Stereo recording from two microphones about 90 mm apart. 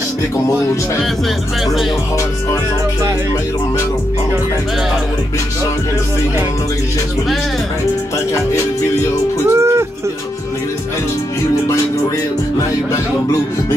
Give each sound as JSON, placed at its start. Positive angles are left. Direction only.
{"t": 9.5, "sound": "music", "side_deg": -30}